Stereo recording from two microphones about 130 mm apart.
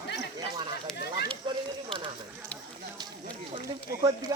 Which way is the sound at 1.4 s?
35° right (ahead or behind).